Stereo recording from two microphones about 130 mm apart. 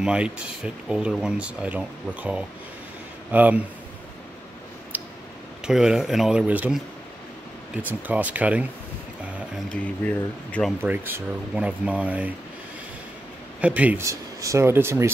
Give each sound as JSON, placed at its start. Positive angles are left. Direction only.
{"t": 0.0, "sound": "speech", "side_deg": -5}
{"t": 5.6, "sound": "speech", "side_deg": -5}
{"t": 7.8, "sound": "speech", "side_deg": -10}
{"t": 9.7, "sound": "speech", "side_deg": 10}
{"t": 10.8, "sound": "speech", "side_deg": -15}
{"t": 13.6, "sound": "speech", "side_deg": -10}
{"t": 14.0, "sound": "speech", "side_deg": -25}